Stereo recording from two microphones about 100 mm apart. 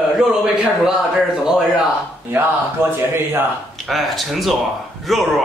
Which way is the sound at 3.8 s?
Centre (ahead or behind).